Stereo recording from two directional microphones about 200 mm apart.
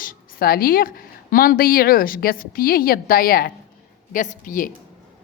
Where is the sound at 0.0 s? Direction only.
45° left (ahead or behind).